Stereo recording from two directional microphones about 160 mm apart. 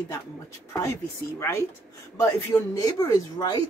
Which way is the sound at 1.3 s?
20° left (ahead or behind).